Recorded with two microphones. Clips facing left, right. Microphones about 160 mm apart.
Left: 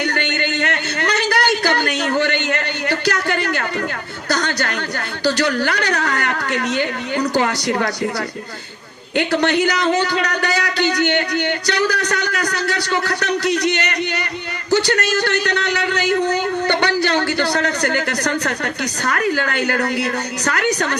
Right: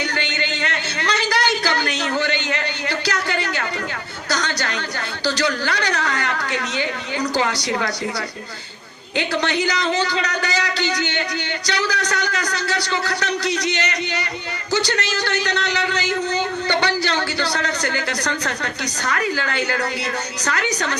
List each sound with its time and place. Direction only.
0.0 s a sound: 55° left (ahead or behind)
5.2 s a man's voice: 55° left (ahead or behind)
9.1 s a man's voice: 55° left (ahead or behind)